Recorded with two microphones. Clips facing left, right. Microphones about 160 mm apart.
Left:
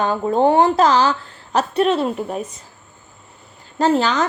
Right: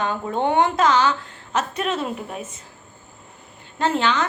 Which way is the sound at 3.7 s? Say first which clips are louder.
Left 4 dB; 35° left (ahead or behind).